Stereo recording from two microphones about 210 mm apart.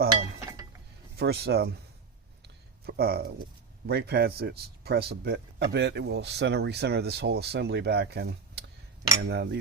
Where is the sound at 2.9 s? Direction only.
50° right (ahead or behind).